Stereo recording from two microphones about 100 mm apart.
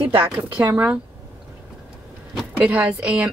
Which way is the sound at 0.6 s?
20° right (ahead or behind).